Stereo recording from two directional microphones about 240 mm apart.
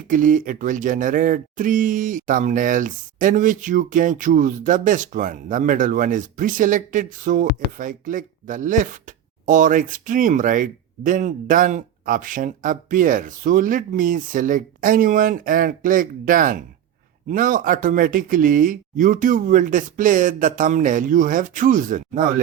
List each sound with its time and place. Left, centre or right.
0.1 s speech: right